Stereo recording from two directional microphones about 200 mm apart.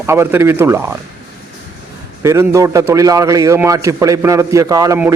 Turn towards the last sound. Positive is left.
turn(degrees=-15)  # may be behind; listen again after turning